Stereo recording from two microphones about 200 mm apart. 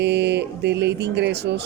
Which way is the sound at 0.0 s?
60° right (ahead or behind).